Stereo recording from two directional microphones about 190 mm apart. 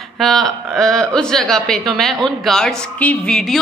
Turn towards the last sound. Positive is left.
turn(degrees=0)  # may be behind; listen again after turning